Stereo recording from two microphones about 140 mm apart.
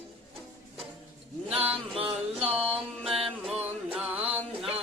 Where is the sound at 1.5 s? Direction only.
10° right (ahead or behind).